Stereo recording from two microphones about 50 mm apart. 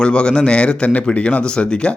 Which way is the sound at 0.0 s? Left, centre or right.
Centre.